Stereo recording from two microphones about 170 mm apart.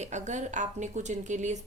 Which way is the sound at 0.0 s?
45° right (ahead or behind).